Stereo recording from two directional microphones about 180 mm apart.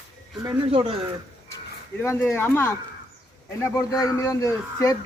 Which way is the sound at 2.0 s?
15° left (ahead or behind).